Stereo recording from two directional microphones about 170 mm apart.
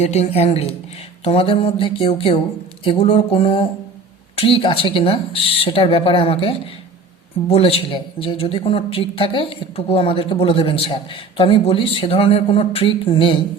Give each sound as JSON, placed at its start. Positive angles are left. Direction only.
{"t": 0.0, "sound": "a woman's voice", "side_deg": 40}